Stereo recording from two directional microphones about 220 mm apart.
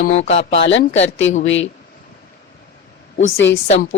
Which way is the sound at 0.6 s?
55° left (ahead or behind).